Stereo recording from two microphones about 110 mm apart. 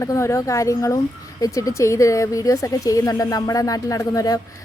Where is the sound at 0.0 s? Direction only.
25° left (ahead or behind).